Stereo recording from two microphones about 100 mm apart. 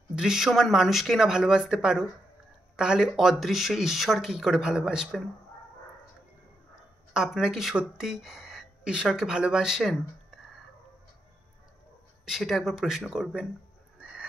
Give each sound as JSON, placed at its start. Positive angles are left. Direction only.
{"t": 0.1, "sound": "speech", "side_deg": -5}
{"t": 7.2, "sound": "speech", "side_deg": -5}
{"t": 12.3, "sound": "speech", "side_deg": 0}